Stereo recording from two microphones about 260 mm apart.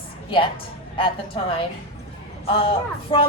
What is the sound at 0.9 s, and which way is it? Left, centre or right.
Speech, centre.